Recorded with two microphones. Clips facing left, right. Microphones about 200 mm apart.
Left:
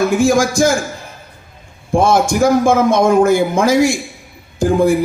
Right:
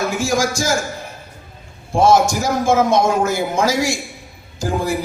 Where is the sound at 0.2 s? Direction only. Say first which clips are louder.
Left 7 dB; 55° left (ahead or behind).